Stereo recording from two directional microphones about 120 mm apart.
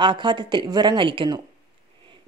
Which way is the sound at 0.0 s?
40° right (ahead or behind).